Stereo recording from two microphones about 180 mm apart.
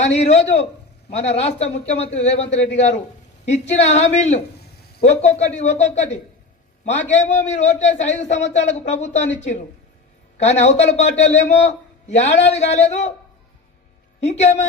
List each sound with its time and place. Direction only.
0.0 s a man's voice: 40° left (ahead or behind)
14.2 s a man's voice: 40° left (ahead or behind)